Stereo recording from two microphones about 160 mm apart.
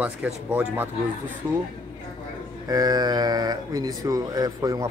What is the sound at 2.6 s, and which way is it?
Speech, 25° right (ahead or behind).